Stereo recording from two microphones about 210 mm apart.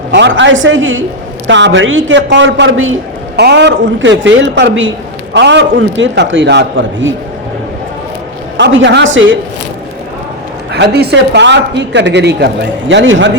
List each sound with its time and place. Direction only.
0.1 s speech: 60° right (ahead or behind)
3.3 s speech: 55° right (ahead or behind)
8.5 s speech: 55° right (ahead or behind)
10.7 s speech: 50° right (ahead or behind)